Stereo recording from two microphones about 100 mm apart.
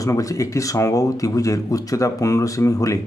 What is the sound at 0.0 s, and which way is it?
Speech, 35° left (ahead or behind).